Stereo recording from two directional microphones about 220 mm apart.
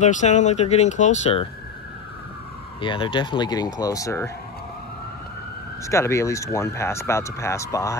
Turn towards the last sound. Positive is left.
turn(degrees=15)  # may be behind; listen again after turning